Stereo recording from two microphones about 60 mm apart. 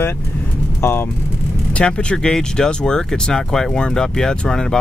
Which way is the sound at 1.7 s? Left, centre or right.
Centre.